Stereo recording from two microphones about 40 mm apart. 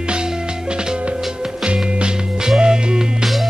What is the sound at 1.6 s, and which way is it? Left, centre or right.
Music, right.